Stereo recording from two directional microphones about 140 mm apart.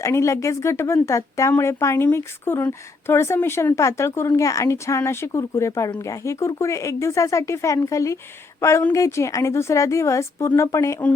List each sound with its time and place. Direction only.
0.0 s a woman's voice: 20° left (ahead or behind)